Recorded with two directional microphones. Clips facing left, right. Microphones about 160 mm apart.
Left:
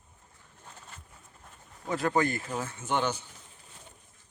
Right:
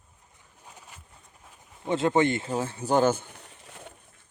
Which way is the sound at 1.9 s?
25° right (ahead or behind).